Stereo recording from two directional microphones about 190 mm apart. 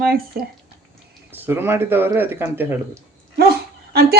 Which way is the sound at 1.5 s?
10° right (ahead or behind).